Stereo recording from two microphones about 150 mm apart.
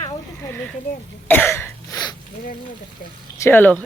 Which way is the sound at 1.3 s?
15° left (ahead or behind).